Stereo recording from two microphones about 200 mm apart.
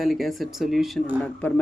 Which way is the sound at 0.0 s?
Centre (ahead or behind).